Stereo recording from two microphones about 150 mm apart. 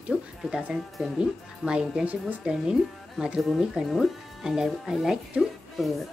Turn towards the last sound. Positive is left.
turn(degrees=0)  # may be behind; listen again after turning